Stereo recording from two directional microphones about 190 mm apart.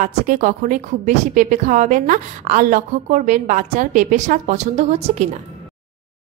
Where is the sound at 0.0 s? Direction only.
40° right (ahead or behind).